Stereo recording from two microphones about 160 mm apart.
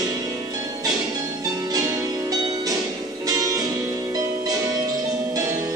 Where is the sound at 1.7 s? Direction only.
25° right (ahead or behind).